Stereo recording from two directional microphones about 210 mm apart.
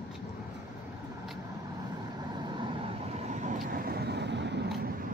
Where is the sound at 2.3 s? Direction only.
20° right (ahead or behind); by 4.7 s 55° right (ahead or behind).